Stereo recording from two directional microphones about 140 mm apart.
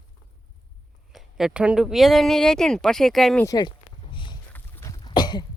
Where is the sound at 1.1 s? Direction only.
5° right (ahead or behind).